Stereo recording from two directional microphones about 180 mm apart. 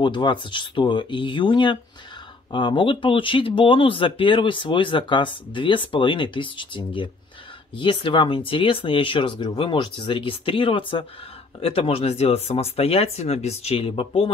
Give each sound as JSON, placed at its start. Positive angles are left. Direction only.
{"t": 0.0, "sound": "speech", "side_deg": 25}